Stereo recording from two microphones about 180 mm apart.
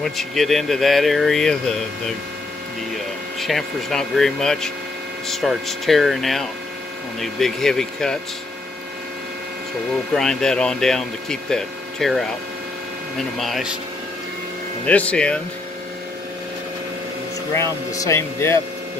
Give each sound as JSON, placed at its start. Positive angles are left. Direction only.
{"t": 0.0, "sound": "speech", "side_deg": 0}
{"t": 3.3, "sound": "speech", "side_deg": 0}
{"t": 10.1, "sound": "speech", "side_deg": 5}
{"t": 13.4, "sound": "speech", "side_deg": 0}
{"t": 14.9, "sound": "speech", "side_deg": 5}
{"t": 17.6, "sound": "speech", "side_deg": 15}